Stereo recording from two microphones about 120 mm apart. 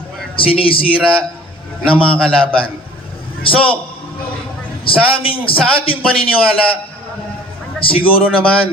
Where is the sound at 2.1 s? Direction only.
10° left (ahead or behind).